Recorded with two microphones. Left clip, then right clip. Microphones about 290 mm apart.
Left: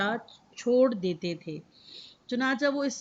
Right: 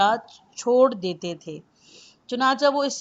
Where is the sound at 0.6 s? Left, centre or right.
Right.